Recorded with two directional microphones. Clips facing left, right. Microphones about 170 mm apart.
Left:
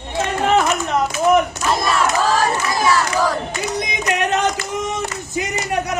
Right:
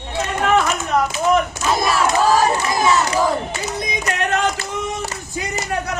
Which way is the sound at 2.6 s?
20° right (ahead or behind).